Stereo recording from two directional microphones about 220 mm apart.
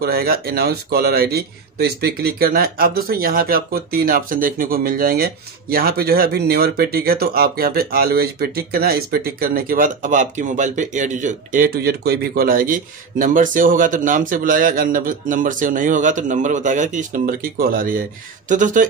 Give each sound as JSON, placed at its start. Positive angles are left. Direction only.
{"t": 0.0, "sound": "speech", "side_deg": -45}